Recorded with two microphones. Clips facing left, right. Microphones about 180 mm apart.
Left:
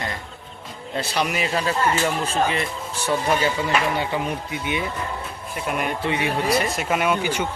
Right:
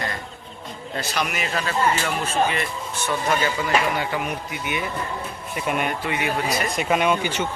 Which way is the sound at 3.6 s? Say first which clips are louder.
Even; 25° left (ahead or behind).